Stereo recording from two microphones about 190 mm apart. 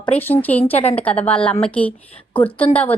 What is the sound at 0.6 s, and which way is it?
Speech, 30° left (ahead or behind).